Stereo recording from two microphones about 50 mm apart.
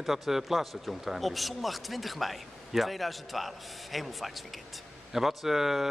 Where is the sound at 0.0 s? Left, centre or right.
Centre.